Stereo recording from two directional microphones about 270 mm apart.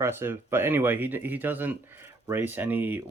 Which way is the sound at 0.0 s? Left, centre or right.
Centre.